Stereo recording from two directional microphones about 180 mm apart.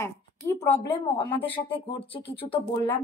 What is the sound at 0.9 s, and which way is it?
Speech, 30° left (ahead or behind).